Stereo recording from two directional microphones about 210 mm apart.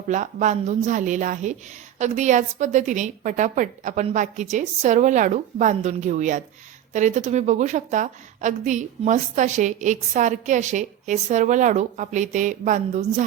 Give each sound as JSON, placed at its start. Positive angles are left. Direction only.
{"t": 0.1, "sound": "a woman's voice", "side_deg": -35}